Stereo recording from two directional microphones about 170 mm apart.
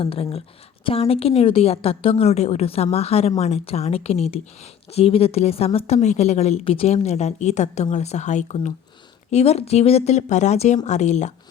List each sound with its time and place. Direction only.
0.0 s a woman's voice: 35° left (ahead or behind)